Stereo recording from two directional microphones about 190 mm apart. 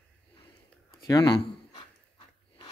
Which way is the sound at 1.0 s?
20° left (ahead or behind).